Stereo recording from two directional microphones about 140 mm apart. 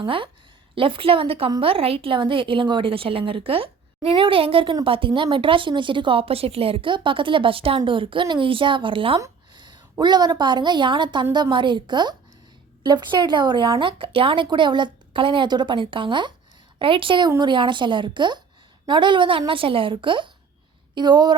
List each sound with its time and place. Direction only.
0.0 s a woman's voice: 35° right (ahead or behind)
9.1 s a sound: 30° right (ahead or behind)
10.0 s a woman's voice: 30° right (ahead or behind)